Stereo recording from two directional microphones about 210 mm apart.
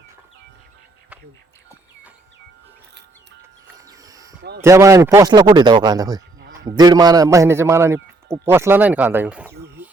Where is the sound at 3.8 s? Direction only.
15° right (ahead or behind).